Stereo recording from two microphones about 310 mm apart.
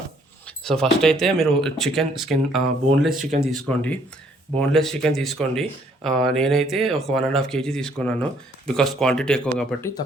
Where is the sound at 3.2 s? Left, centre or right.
Right.